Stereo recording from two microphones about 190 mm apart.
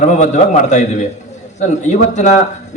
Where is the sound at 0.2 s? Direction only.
40° left (ahead or behind).